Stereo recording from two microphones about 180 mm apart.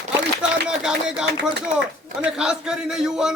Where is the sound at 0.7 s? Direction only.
5° right (ahead or behind).